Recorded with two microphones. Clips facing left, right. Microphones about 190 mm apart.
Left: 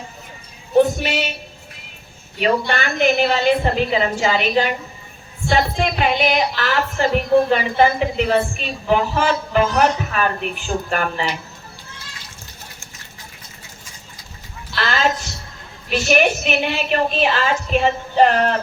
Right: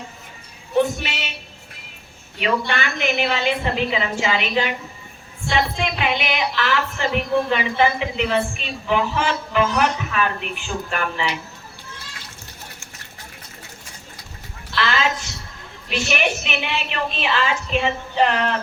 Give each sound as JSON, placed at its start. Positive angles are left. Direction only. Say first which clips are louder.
{"t": 0.8, "sound": "a sound", "louder": "left 5 dB", "side_deg": 40}
{"t": 2.4, "sound": "a woman's voice", "louder": "left 3 dB", "side_deg": 40}
{"t": 14.8, "sound": "a woman's voice", "louder": "left 2 dB", "side_deg": 40}